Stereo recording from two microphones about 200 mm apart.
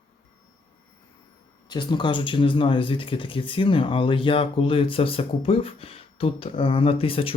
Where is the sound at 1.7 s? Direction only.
25° left (ahead or behind).